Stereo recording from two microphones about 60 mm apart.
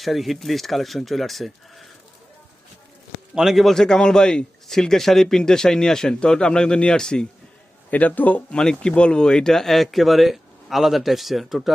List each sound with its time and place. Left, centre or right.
0.0 s speech: centre
3.3 s a man's voice: centre
7.9 s a man's voice: left
8.4 s speech: centre